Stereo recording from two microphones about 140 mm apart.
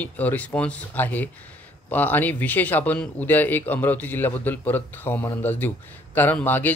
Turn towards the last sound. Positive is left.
turn(degrees=15)  # may be behind; listen again after turning